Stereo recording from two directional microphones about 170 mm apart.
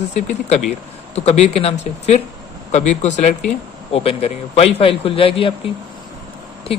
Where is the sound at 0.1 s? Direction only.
40° left (ahead or behind).